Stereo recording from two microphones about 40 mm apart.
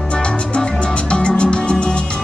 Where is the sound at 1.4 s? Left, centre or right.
Left.